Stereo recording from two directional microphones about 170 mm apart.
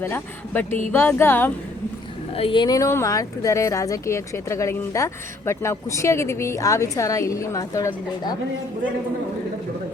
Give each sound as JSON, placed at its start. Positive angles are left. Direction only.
{"t": 0.0, "sound": "speech", "side_deg": 15}
{"t": 2.3, "sound": "speech", "side_deg": 30}